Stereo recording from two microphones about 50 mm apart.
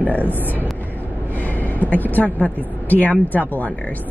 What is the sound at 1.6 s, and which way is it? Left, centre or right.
A woman's voice, left.